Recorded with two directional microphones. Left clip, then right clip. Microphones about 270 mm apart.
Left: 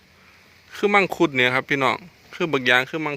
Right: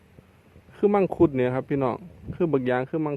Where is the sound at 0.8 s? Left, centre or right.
Centre.